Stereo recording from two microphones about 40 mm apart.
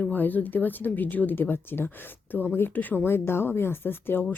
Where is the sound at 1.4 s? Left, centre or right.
Left.